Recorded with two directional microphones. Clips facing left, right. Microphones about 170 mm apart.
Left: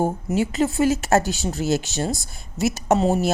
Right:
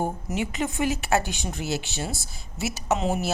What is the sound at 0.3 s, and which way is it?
A woman's voice, 35° left (ahead or behind).